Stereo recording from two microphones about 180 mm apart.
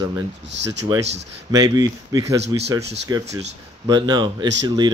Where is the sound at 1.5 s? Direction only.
20° right (ahead or behind).